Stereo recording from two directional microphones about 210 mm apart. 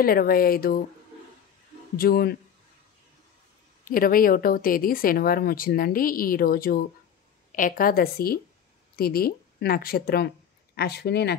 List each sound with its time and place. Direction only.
0.0 s speech: 45° left (ahead or behind)
2.0 s speech: 45° left (ahead or behind)
3.8 s speech: 40° left (ahead or behind)